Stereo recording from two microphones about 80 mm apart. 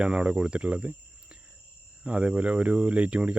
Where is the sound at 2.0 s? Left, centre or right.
Centre.